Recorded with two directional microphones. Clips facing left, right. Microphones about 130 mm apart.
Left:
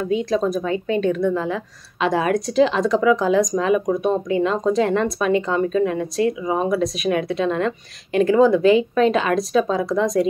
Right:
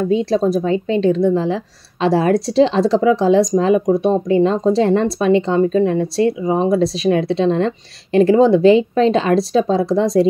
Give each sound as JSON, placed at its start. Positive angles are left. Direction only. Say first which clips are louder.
{"t": 0.0, "sound": "speech", "louder": "right 4 dB", "side_deg": -30}